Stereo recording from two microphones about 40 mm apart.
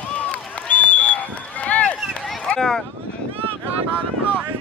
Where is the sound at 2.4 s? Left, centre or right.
Centre.